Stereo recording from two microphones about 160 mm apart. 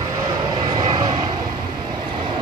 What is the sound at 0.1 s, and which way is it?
Vehicle, 25° right (ahead or behind).